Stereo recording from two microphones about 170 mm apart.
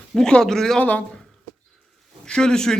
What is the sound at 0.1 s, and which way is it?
Speech, 5° left (ahead or behind).